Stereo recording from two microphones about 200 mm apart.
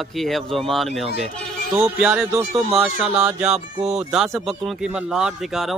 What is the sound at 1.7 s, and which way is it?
Music, 10° right (ahead or behind).